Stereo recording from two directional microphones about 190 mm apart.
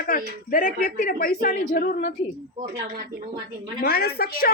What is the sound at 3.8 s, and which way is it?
Speech, 55° left (ahead or behind).